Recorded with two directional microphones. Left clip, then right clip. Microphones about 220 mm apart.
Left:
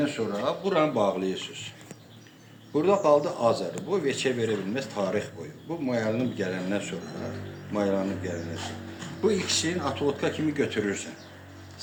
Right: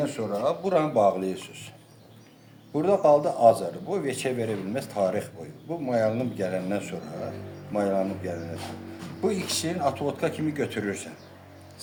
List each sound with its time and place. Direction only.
0.0 s speech: 50° right (ahead or behind)
2.7 s speech: 50° right (ahead or behind)